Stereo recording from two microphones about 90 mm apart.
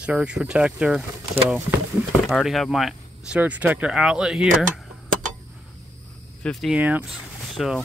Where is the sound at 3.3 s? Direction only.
15° right (ahead or behind).